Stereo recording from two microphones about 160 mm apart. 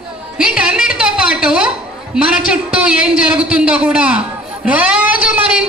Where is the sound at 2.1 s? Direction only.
5° right (ahead or behind).